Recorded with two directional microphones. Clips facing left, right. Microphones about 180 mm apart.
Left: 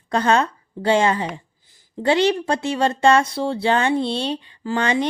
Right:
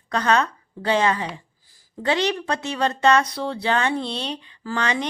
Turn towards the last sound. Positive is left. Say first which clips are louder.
# left 4 dB
turn(degrees=30)  # may be behind; listen again after turning